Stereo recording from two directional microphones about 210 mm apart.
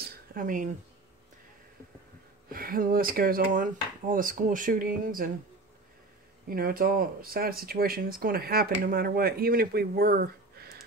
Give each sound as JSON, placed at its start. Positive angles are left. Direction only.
{"t": 0.0, "sound": "a sound", "side_deg": -45}
{"t": 2.5, "sound": "speech", "side_deg": -45}
{"t": 6.5, "sound": "speech", "side_deg": -45}